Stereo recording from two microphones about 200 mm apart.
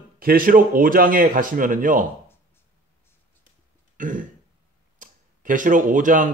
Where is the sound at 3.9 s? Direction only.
40° right (ahead or behind).